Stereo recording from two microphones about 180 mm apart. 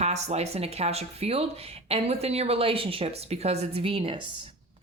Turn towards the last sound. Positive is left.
turn(degrees=-30)  # may be behind; listen again after turning